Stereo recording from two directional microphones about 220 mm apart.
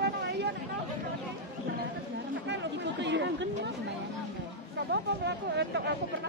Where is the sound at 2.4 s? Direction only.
55° right (ahead or behind).